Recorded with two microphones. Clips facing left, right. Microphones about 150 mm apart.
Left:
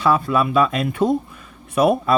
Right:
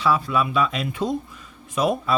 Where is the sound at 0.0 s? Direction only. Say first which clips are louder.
Left 3 dB; 50° left (ahead or behind).